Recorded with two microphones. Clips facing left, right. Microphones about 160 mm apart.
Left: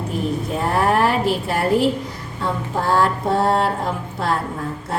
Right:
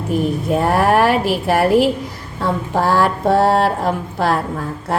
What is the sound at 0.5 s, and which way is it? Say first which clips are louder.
A woman's voice: right 5 dB; 70° right (ahead or behind).